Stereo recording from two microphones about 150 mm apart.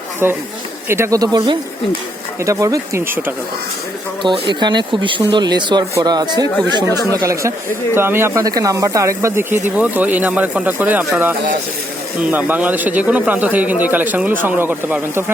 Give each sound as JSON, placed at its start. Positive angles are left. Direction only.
{"t": 0.9, "sound": "speech", "side_deg": -15}
{"t": 4.2, "sound": "speech", "side_deg": -30}
{"t": 7.9, "sound": "speech", "side_deg": -15}